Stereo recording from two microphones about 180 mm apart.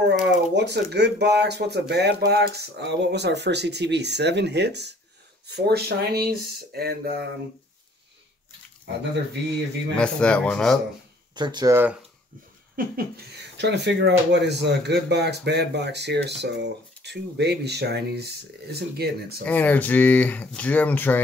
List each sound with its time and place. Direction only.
0.3 s speech: 70° right (ahead or behind)
9.9 s speech: 5° left (ahead or behind)
11.3 s speech: 25° right (ahead or behind)
12.7 s speech: 60° right (ahead or behind)
19.4 s speech: 10° left (ahead or behind)